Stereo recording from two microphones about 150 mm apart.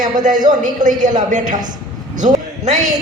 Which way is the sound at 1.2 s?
55° right (ahead or behind).